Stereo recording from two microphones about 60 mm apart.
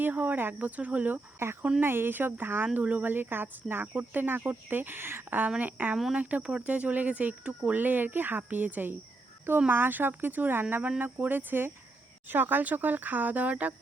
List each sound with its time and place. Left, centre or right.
0.0 s speech: right
1.4 s speech: right